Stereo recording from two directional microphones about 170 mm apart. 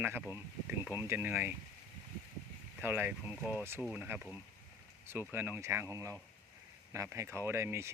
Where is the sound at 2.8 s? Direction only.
10° right (ahead or behind).